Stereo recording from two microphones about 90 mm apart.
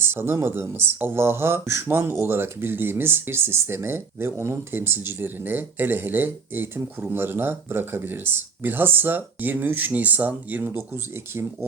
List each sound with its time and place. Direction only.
0.0 s speech: 25° right (ahead or behind)
10.7 s speech: 30° right (ahead or behind)